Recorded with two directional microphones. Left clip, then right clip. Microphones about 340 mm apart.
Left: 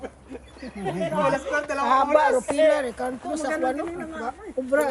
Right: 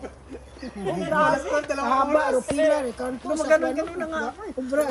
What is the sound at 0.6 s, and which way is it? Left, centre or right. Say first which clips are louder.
A woman's voice: even; centre.